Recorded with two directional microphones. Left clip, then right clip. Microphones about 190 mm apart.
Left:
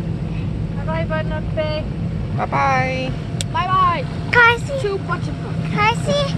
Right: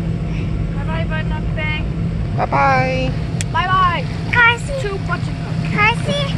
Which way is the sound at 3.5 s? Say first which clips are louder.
Right 1 dB; 30° left (ahead or behind).